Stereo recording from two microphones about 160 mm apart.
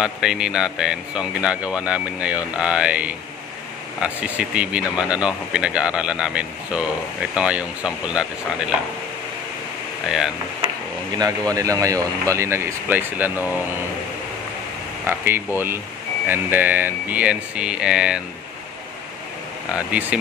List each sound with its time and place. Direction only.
0.0 s speech: 5° right (ahead or behind)
10.0 s speech: 5° right (ahead or behind)
11.5 s speech: 20° right (ahead or behind)
15.0 s speech: 15° right (ahead or behind)
19.7 s speech: 10° right (ahead or behind)